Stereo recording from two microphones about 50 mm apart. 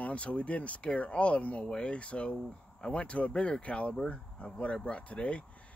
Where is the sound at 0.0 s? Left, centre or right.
Left.